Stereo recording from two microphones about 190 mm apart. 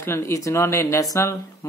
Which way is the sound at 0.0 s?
15° left (ahead or behind).